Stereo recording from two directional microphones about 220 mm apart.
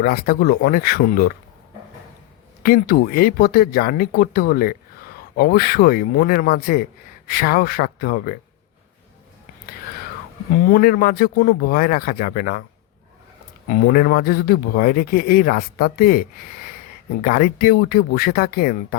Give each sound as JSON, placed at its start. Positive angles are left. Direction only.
{"t": 0.0, "sound": "a man's voice", "side_deg": 45}
{"t": 2.6, "sound": "a man's voice", "side_deg": 40}
{"t": 10.7, "sound": "a man's voice", "side_deg": 40}
{"t": 13.7, "sound": "a man's voice", "side_deg": 40}